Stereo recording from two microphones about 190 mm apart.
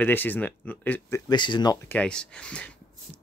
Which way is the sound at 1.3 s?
25° left (ahead or behind).